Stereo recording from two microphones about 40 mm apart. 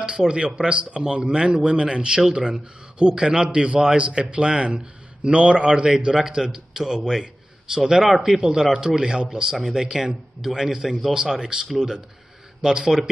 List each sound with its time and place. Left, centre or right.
0.2 s speech: centre
0.7 s speech: right
6.1 s speech: centre
7.0 s a man's voice: centre
7.7 s speech: centre